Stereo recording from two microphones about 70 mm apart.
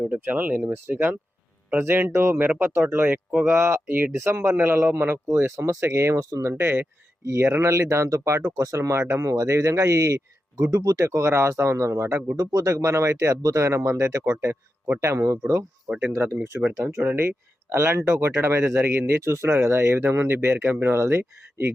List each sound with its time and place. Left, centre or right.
0.1 s speech: right
3.5 s speech: right
12.4 s speech: right
17.7 s speech: right